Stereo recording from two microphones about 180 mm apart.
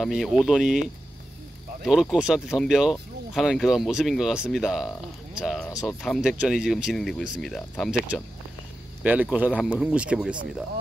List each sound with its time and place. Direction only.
0.0 s speech: centre (ahead or behind)
1.9 s speech: 5° right (ahead or behind)
5.7 s speech: 15° left (ahead or behind)
6.0 s speech: centre (ahead or behind)
9.0 s speech: 10° right (ahead or behind)